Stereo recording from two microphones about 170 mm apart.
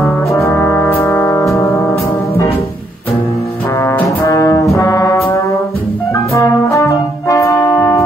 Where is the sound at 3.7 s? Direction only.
15° left (ahead or behind).